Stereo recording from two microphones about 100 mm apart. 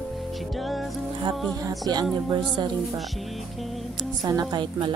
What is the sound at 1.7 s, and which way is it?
Speech, 45° right (ahead or behind).